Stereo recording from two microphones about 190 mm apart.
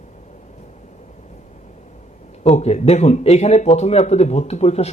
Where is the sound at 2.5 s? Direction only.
35° left (ahead or behind).